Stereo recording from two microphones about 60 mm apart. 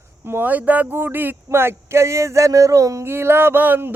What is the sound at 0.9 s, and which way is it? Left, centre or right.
Speech, right.